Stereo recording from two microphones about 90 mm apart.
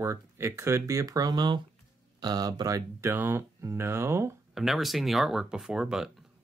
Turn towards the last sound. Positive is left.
turn(degrees=-5)  # may be behind; listen again after turning